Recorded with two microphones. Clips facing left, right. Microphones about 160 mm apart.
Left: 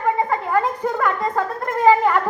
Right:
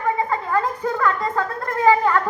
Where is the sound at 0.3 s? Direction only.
20° left (ahead or behind).